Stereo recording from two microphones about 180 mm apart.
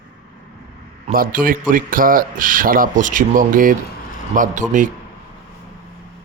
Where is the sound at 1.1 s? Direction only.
50° right (ahead or behind).